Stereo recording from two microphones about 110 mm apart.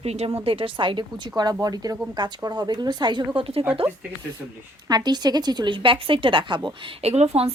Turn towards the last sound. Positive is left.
turn(degrees=-70)  # may be behind; listen again after turning